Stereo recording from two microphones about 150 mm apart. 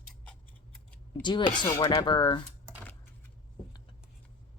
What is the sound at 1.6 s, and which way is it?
Speech, 20° left (ahead or behind).